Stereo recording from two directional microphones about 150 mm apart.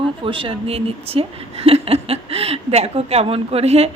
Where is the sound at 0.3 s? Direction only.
35° right (ahead or behind).